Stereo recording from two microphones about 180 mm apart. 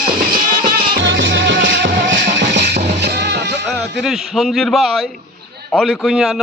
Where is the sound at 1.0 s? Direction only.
85° right; by 3.5 s 70° right (ahead or behind).